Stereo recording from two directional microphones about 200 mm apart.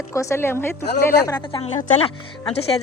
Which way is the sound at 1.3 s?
25° left (ahead or behind).